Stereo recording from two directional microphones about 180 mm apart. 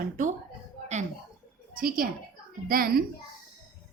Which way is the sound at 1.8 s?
50° right (ahead or behind).